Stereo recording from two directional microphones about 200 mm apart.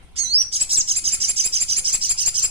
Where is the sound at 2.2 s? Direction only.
25° right (ahead or behind).